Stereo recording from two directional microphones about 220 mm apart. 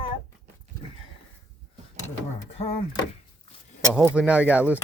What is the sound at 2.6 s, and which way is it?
Speech, 25° left (ahead or behind).